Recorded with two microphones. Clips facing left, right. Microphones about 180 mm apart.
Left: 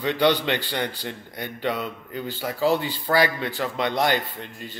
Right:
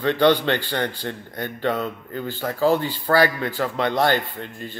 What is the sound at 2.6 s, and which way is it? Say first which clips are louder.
Speech: right 3 dB; 40° right (ahead or behind).